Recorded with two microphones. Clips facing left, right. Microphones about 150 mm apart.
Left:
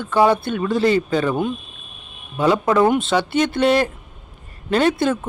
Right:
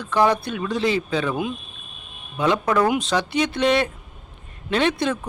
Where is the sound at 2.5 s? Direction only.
25° left (ahead or behind).